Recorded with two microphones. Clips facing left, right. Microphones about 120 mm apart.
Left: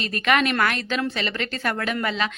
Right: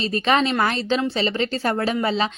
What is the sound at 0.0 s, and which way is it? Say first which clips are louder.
A woman's voice: right 2 dB; 30° right (ahead or behind).